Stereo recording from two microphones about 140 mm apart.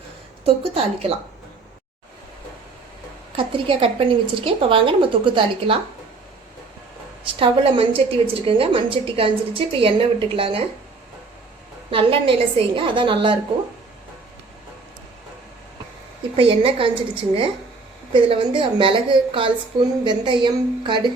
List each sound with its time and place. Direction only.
0.4 s a woman's voice: 45° right (ahead or behind)
3.3 s a woman's voice: 40° right (ahead or behind)
7.3 s a woman's voice: 35° right (ahead or behind)
11.9 s a woman's voice: 40° right (ahead or behind)
16.3 s a woman's voice: 40° right (ahead or behind)